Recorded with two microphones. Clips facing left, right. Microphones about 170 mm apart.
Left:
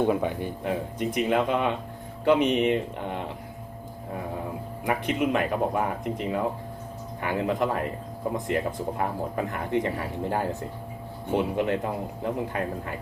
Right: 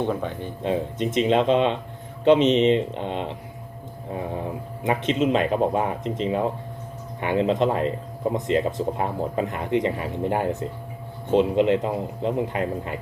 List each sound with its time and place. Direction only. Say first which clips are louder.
0.0 s speech: left 2 dB; 10° left (ahead or behind)
0.6 s speech: right 6 dB; 20° right (ahead or behind)
4.8 s speech: right 4 dB; 20° right (ahead or behind)